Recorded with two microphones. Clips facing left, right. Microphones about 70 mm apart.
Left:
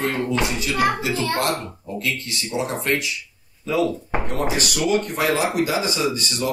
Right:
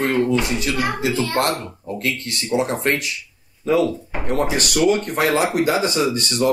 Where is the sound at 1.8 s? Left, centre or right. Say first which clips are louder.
Right 3 dB; right.